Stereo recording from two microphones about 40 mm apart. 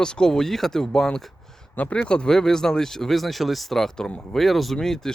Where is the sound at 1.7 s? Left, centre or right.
Left.